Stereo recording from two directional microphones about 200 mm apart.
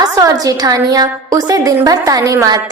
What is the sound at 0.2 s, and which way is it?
A woman's voice, 15° right (ahead or behind).